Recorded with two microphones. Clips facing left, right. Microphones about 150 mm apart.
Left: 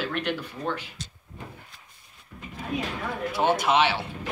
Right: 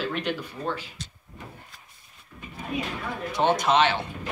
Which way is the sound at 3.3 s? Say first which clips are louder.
Right 1 dB; 10° left (ahead or behind).